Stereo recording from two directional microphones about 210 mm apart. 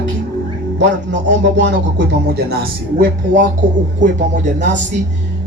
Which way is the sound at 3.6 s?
60° right (ahead or behind).